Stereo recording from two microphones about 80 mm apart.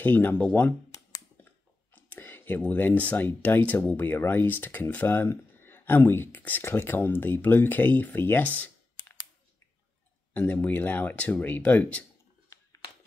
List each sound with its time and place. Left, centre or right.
0.0 s speech: left
10.4 s speech: left